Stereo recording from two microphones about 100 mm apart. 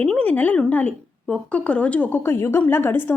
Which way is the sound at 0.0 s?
10° left (ahead or behind).